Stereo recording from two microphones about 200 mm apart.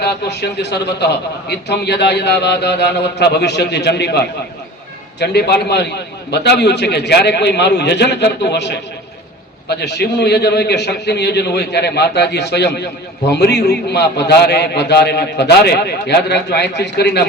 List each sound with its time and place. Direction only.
0.0 s a man's voice: 55° left (ahead or behind)